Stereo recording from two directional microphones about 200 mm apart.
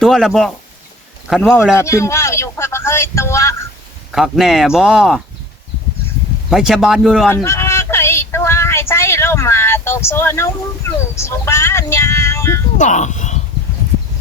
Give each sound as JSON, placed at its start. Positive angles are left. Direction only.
{"t": 0.0, "sound": "speech", "side_deg": 0}
{"t": 1.7, "sound": "speech", "side_deg": 15}
{"t": 4.1, "sound": "speech", "side_deg": 0}
{"t": 6.5, "sound": "speech", "side_deg": 0}
{"t": 7.3, "sound": "a sound", "side_deg": 15}
{"t": 12.7, "sound": "speech", "side_deg": 35}